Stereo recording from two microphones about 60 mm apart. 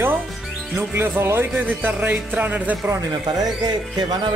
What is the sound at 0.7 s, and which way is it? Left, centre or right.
Speech, right.